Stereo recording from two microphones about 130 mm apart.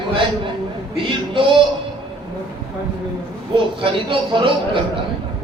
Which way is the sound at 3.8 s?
40° right (ahead or behind).